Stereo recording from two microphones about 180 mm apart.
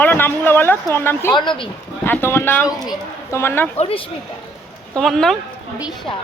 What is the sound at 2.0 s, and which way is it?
Speech, 15° left (ahead or behind).